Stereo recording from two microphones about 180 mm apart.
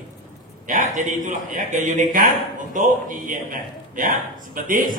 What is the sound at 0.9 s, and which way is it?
A man's voice, 45° right (ahead or behind).